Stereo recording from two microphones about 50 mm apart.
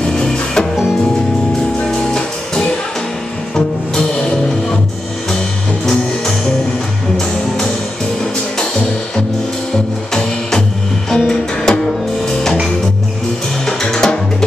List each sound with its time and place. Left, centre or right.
0.0 s music: centre
2.0 s music: centre
5.9 s music: centre
11.1 s music: centre
13.7 s music: centre